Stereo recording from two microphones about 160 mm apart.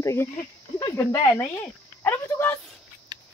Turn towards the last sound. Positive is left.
turn(degrees=-25)  # may be behind; listen again after turning